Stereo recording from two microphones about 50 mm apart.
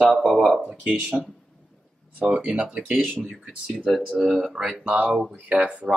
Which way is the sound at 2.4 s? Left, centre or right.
Centre.